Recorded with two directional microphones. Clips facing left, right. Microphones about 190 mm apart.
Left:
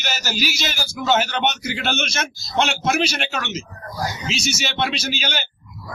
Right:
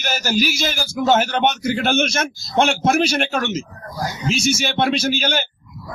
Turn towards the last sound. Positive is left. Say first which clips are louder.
# right 6 dB
turn(degrees=-50)  # may be behind; listen again after turning